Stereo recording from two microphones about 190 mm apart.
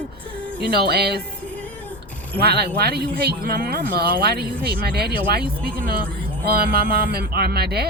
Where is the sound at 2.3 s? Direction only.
60° right (ahead or behind).